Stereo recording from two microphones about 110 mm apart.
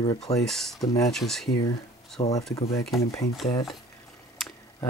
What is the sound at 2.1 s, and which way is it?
Speech, 85° left.